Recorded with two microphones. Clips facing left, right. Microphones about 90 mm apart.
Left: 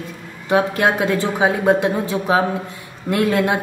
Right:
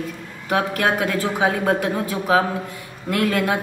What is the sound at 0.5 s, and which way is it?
Speech, 25° left (ahead or behind).